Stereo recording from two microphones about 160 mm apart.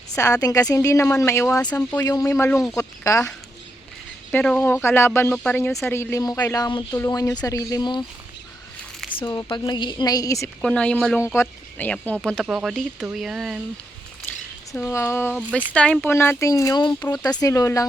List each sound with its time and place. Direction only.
0.4 s a woman's voice: 20° left (ahead or behind)
4.3 s a woman's voice: 10° left (ahead or behind); by 8.0 s 30° left (ahead or behind)
9.1 s a woman's voice: 30° left (ahead or behind)
10.6 s speech: 5° left (ahead or behind)
14.3 s squish: 10° left (ahead or behind)
14.7 s a woman's voice: 15° left (ahead or behind)